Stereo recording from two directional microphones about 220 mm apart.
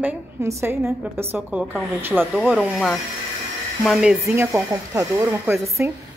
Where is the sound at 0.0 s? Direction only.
10° right (ahead or behind).